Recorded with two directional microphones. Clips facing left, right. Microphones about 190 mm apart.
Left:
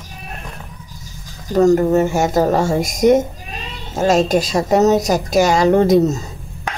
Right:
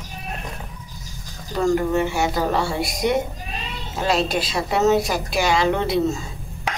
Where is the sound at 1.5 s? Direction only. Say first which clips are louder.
Left 7 dB; 40° left (ahead or behind).